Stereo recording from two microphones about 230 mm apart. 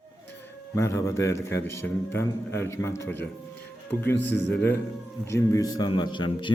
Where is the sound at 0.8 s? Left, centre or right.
Centre.